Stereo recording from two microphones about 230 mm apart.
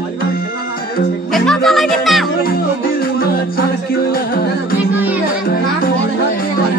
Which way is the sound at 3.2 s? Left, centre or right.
Left.